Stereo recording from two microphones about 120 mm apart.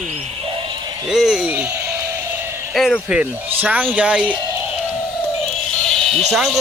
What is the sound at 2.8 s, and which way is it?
Speech, centre (ahead or behind).